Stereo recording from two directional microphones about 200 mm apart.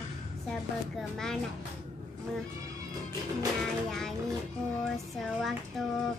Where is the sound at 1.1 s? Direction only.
5° left (ahead or behind).